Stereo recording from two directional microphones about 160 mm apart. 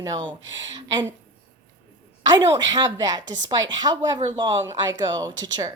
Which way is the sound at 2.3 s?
25° right (ahead or behind).